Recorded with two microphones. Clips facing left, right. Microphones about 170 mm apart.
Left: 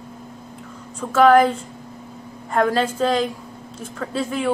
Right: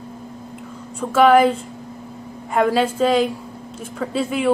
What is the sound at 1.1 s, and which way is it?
Speech, 5° right (ahead or behind).